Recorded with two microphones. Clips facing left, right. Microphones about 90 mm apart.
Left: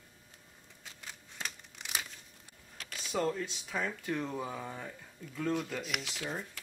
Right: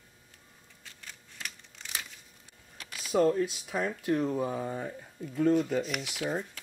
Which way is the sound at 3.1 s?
20° right (ahead or behind).